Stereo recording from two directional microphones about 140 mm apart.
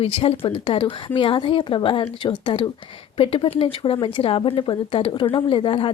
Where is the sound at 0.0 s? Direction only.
45° left (ahead or behind).